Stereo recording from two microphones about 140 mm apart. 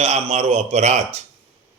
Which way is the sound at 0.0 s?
50° right (ahead or behind).